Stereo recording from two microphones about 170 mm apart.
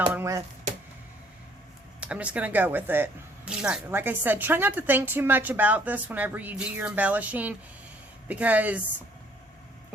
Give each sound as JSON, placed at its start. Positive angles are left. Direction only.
{"t": 0.1, "sound": "chop", "side_deg": -15}
{"t": 2.0, "sound": "speech", "side_deg": -5}